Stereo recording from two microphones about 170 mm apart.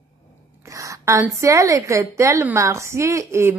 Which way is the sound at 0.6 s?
20° right (ahead or behind).